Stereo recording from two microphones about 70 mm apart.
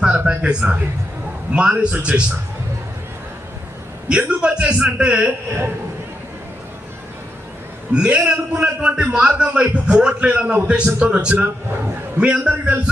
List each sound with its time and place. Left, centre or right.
0.0 s a sound: centre
1.5 s a man's voice: centre
4.1 s a man's voice: centre
7.9 s a man's voice: centre